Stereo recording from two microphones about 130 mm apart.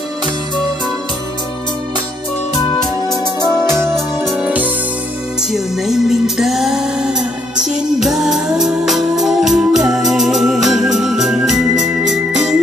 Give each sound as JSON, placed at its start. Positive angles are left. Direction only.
{"t": 2.7, "sound": "music", "side_deg": 30}
{"t": 3.6, "sound": "music", "side_deg": -20}
{"t": 4.2, "sound": "music", "side_deg": 0}
{"t": 4.5, "sound": "music", "side_deg": -10}